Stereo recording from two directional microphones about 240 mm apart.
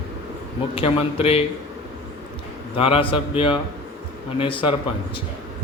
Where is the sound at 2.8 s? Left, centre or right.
Left.